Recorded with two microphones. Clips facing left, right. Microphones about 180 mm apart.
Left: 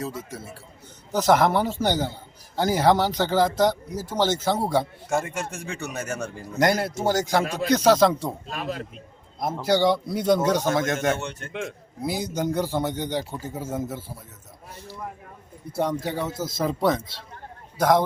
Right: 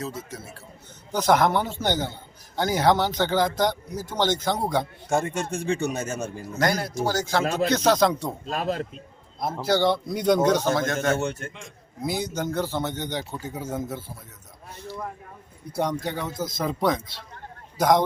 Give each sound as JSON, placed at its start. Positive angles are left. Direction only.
{"t": 0.0, "sound": "speech", "side_deg": 10}
{"t": 5.0, "sound": "speech", "side_deg": -30}
{"t": 6.6, "sound": "a man's voice", "side_deg": 25}
{"t": 7.7, "sound": "speech", "side_deg": 10}
{"t": 8.4, "sound": "speech", "side_deg": -40}
{"t": 9.6, "sound": "speech", "side_deg": 15}
{"t": 10.8, "sound": "a man's voice", "side_deg": 20}
{"t": 11.2, "sound": "a man's voice", "side_deg": -45}
{"t": 12.3, "sound": "speech", "side_deg": 15}